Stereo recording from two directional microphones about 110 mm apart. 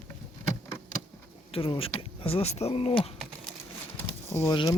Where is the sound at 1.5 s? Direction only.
60° left (ahead or behind).